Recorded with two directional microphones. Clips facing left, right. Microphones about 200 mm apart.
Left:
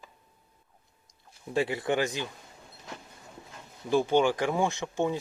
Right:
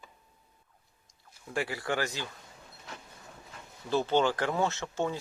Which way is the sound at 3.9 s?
10° left (ahead or behind).